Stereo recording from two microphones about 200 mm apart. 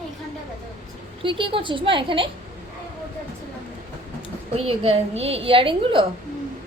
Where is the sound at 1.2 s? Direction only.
25° right (ahead or behind).